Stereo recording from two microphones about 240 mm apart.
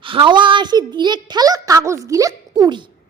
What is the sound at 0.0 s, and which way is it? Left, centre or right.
A woman's voice, right.